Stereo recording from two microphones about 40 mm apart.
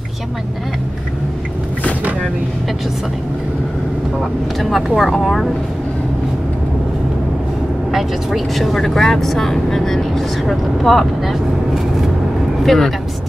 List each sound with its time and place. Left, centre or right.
4.2 s speech: centre
7.9 s speech: centre